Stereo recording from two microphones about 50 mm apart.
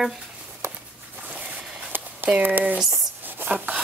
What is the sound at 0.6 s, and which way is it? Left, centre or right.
Walk, right.